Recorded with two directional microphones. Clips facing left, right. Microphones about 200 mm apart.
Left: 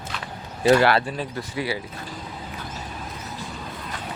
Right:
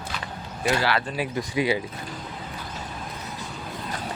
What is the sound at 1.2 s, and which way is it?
Speech, 15° right (ahead or behind).